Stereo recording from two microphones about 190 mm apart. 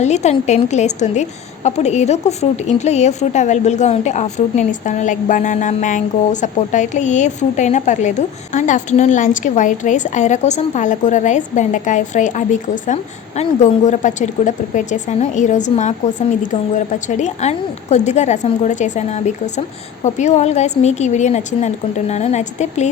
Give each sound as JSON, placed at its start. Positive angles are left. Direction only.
{"t": 0.0, "sound": "a woman's voice", "side_deg": 35}